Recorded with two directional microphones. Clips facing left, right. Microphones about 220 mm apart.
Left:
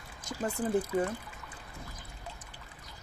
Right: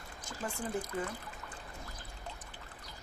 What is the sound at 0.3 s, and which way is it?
Speech, 35° left (ahead or behind).